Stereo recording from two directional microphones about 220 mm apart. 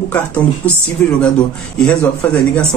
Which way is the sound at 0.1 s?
5° left (ahead or behind).